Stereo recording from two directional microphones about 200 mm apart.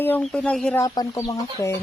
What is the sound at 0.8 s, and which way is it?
Speech, 20° left (ahead or behind).